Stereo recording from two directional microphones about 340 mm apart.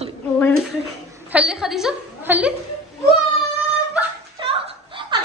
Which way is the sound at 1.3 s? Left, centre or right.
Centre.